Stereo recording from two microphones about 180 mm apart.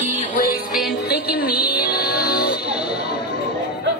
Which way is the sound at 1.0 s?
60° left (ahead or behind).